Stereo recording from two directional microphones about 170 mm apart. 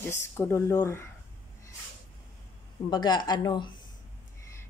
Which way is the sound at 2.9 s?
25° left (ahead or behind).